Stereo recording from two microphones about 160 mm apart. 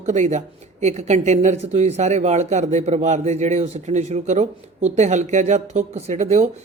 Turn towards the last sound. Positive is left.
turn(degrees=-45)  # may be behind; listen again after turning